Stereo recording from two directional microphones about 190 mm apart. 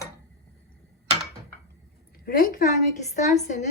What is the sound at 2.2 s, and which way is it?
A woman's voice, 50° left (ahead or behind).